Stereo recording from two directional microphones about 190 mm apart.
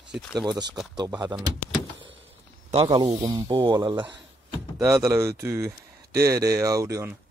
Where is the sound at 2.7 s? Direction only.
30° right (ahead or behind).